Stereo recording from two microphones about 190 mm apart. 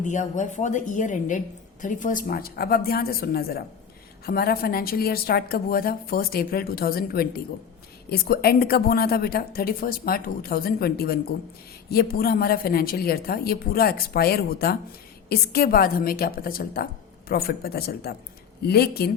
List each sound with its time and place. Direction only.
0.0 s a woman's voice: 40° left (ahead or behind)